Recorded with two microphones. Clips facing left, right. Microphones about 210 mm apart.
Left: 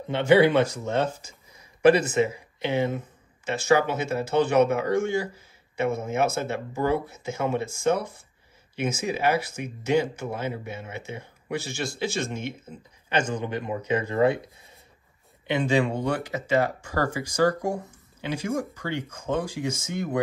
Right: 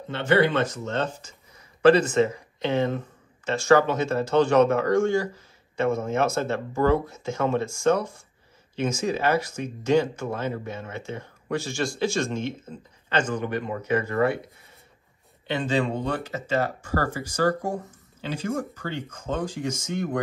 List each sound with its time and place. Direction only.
0.1 s a man's voice: 10° left (ahead or behind)
15.4 s speech: 10° left (ahead or behind)